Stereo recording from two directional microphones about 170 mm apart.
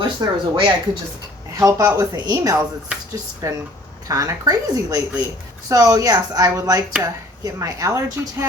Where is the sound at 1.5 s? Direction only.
20° right (ahead or behind).